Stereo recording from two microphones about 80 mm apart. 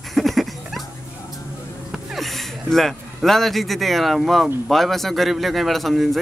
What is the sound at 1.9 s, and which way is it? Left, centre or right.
A man's voice, centre.